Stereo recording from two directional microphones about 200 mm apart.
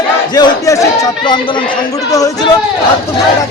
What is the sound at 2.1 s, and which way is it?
Speech, 15° left (ahead or behind).